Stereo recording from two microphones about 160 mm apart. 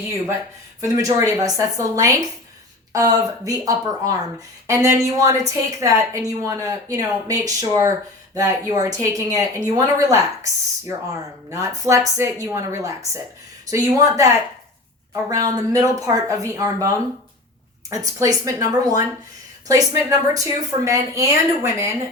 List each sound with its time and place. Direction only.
0.8 s speech: 20° right (ahead or behind)
17.8 s speech: 20° right (ahead or behind)